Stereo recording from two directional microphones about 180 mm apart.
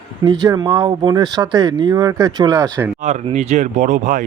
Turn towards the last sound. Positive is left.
turn(degrees=-45)  # may be behind; listen again after turning